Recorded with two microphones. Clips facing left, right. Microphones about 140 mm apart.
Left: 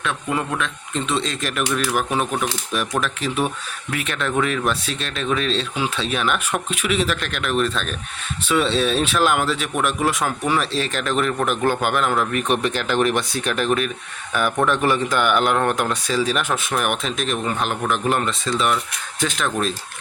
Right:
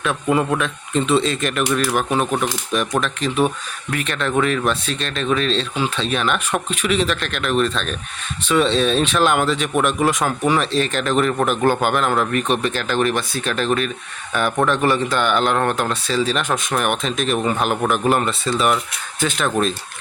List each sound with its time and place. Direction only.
0.3 s speech: 15° right (ahead or behind); by 12.5 s 5° left (ahead or behind)
12.6 s speech: 15° left (ahead or behind); by 17.3 s centre (ahead or behind)
17.4 s speech: 10° right (ahead or behind)